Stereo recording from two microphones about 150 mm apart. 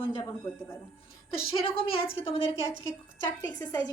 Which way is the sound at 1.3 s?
40° left (ahead or behind).